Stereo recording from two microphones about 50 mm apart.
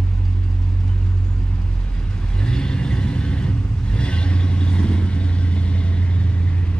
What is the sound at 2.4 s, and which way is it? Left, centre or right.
Vehicle, centre.